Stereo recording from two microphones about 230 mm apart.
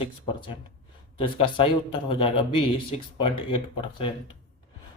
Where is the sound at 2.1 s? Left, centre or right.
Left.